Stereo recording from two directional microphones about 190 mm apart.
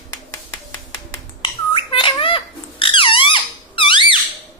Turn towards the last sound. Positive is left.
turn(degrees=25)  # may be behind; listen again after turning